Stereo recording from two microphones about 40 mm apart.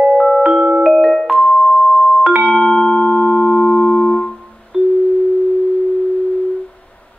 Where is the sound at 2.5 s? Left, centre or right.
Centre.